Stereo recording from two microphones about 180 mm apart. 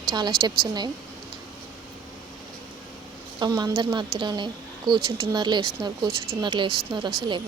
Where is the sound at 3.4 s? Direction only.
20° right (ahead or behind).